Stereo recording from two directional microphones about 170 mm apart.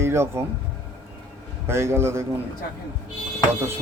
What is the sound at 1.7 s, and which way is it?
Speech, 15° right (ahead or behind).